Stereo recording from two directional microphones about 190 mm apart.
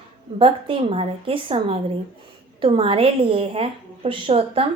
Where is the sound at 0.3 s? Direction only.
30° right (ahead or behind).